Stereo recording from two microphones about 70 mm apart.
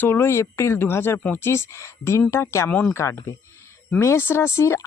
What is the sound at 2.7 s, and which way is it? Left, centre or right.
Speech, left.